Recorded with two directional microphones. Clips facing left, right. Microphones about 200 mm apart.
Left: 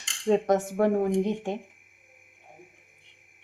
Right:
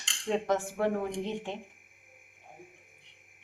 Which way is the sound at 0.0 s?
45° left (ahead or behind).